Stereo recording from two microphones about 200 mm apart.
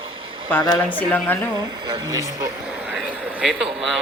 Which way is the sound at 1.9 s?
20° right (ahead or behind).